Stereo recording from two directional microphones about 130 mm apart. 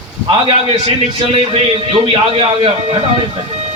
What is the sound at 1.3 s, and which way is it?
A man's voice, 50° right (ahead or behind).